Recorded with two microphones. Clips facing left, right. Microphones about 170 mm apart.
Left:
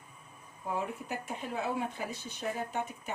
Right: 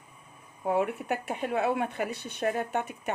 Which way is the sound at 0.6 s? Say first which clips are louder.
Right 8 dB; 65° right (ahead or behind).